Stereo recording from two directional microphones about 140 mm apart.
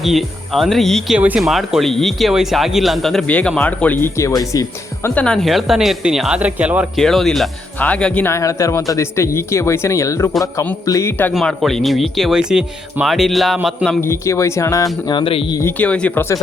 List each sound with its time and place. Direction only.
0.0 s speech: centre (ahead or behind); by 4.6 s 25° left (ahead or behind)
5.0 s speech: 10° left (ahead or behind); by 7.0 s 10° right (ahead or behind)
7.0 s speech: 5° left (ahead or behind); by 11.1 s 20° left (ahead or behind)
11.3 s speech: centre (ahead or behind)
14.0 s speech: 20° left (ahead or behind)
15.0 s speech: 35° left (ahead or behind)
15.8 s speech: 10° left (ahead or behind)